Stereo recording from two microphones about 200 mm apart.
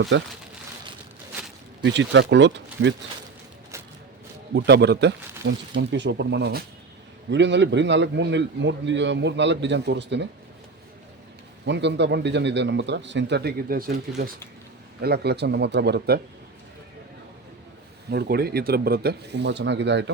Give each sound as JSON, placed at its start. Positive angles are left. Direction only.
{"t": 0.1, "sound": "speech", "side_deg": -65}
{"t": 1.8, "sound": "a man's voice", "side_deg": -65}
{"t": 4.5, "sound": "a man's voice", "side_deg": -55}
{"t": 11.6, "sound": "a man's voice", "side_deg": -60}
{"t": 18.1, "sound": "speech", "side_deg": -55}